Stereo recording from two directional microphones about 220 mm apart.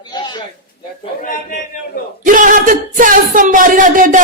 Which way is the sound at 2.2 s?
35° right (ahead or behind).